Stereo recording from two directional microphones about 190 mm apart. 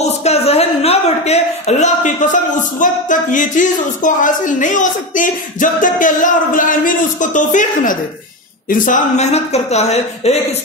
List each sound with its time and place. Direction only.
0.2 s a man's voice: 35° left (ahead or behind)